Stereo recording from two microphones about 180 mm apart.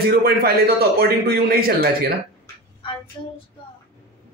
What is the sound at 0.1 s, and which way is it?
A man's voice, 60° right (ahead or behind).